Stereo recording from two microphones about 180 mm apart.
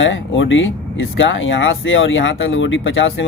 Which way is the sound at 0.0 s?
90° left.